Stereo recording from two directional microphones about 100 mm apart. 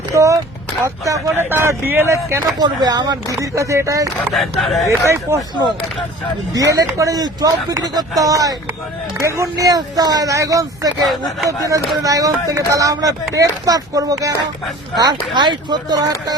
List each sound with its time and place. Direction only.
0.1 s speech: 35° right (ahead or behind)
1.4 s speech: 20° right (ahead or behind)
2.6 s speech: 45° right (ahead or behind)
4.4 s speech: centre (ahead or behind)
5.0 s speech: 25° right (ahead or behind)
6.5 s speech: 35° right (ahead or behind)
11.0 s speech: centre (ahead or behind)
11.4 s speech: 35° right (ahead or behind)